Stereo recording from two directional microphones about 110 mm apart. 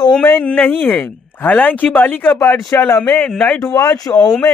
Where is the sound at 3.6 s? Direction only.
30° left (ahead or behind).